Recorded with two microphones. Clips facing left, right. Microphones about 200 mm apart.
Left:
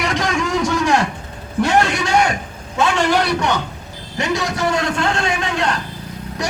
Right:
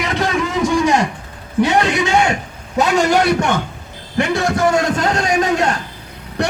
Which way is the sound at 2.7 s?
40° right (ahead or behind).